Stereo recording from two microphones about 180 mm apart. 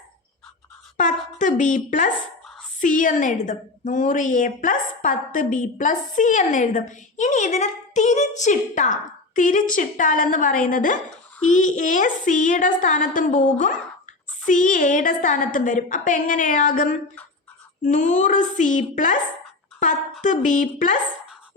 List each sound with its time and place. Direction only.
0.9 s a woman's voice: 45° left (ahead or behind)
20.2 s a woman's voice: 45° left (ahead or behind)